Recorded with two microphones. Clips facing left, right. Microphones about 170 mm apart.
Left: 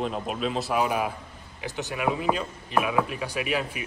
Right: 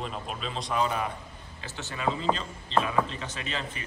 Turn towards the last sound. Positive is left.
turn(degrees=10)  # may be behind; listen again after turning